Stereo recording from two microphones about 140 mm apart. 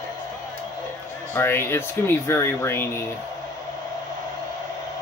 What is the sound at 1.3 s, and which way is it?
Speech, 15° left (ahead or behind).